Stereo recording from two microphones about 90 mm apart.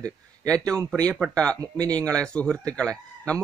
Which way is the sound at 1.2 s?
30° right (ahead or behind).